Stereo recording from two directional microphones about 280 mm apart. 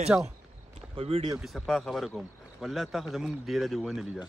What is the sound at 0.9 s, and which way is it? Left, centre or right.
Speech, centre.